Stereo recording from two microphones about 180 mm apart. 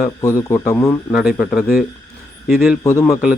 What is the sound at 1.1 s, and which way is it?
Speech, centre (ahead or behind).